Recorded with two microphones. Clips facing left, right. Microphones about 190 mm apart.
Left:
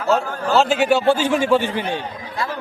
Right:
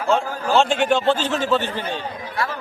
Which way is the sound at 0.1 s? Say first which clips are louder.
Left 1 dB; 5° left (ahead or behind).